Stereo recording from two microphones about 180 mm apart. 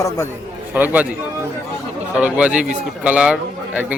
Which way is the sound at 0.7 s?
10° right (ahead or behind).